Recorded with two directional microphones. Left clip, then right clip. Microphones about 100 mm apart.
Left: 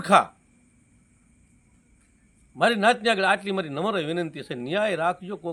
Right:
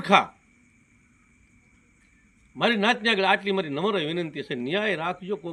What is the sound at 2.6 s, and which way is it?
A man's voice, 40° left (ahead or behind).